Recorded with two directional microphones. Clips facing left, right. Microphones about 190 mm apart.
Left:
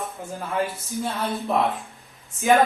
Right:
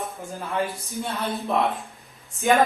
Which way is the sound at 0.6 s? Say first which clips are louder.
Left 1 dB; centre (ahead or behind).